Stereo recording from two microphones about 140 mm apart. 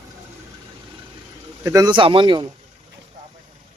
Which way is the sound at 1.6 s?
25° right (ahead or behind).